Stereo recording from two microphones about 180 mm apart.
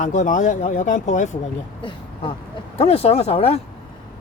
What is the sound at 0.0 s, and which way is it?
Speech, 45° left (ahead or behind).